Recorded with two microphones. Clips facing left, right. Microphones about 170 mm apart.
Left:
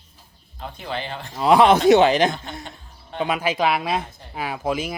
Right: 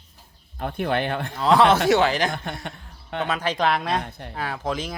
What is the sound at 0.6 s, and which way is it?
Speech, 60° right (ahead or behind).